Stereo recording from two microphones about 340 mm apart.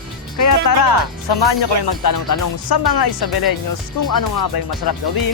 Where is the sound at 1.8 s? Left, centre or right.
Left.